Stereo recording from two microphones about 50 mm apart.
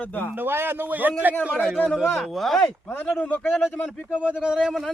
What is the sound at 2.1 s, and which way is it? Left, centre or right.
Speech, centre.